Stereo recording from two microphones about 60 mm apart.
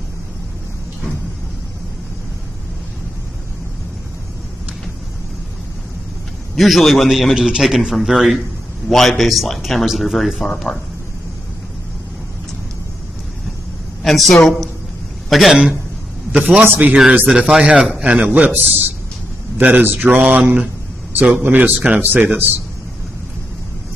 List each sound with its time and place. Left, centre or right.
6.5 s a man's voice: centre
14.0 s a man's voice: centre
16.7 s mantra: right
17.3 s a man's voice: centre
18.0 s mantra: right
18.5 s a man's voice: right
19.6 s mantra: right
22.0 s a man's voice: right